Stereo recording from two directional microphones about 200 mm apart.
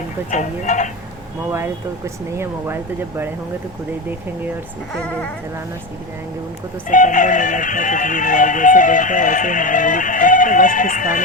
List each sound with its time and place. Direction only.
0.3 s music: 35° left (ahead or behind)
1.5 s speech: 10° right (ahead or behind)
6.9 s music: 40° left (ahead or behind)